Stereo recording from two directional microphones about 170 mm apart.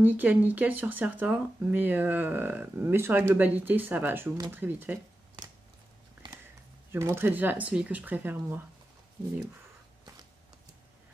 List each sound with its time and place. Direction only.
0.0 s speech: 10° right (ahead or behind)
6.2 s a sound: 25° right (ahead or behind)
6.9 s speech: 15° right (ahead or behind)